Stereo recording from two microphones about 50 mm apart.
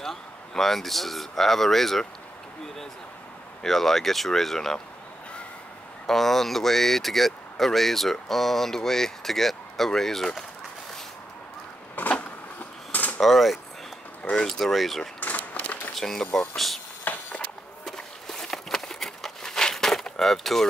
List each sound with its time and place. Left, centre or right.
0.0 s speech: centre
3.6 s speech: centre
6.0 s speech: centre
13.2 s speech: centre
14.3 s speech: centre
15.1 s a sound: left
15.9 s speech: centre
17.1 s a sound: left
17.8 s a sound: centre